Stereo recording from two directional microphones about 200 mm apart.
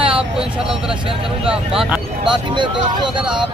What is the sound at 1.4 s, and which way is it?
Speech, 5° right (ahead or behind).